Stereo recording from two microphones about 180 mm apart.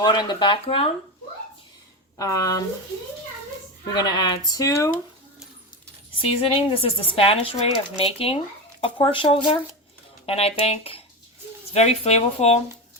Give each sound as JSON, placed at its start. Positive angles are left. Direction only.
{"t": 0.0, "sound": "speech", "side_deg": 25}
{"t": 2.1, "sound": "speech", "side_deg": 20}
{"t": 3.9, "sound": "speech", "side_deg": 20}
{"t": 6.2, "sound": "speech", "side_deg": 35}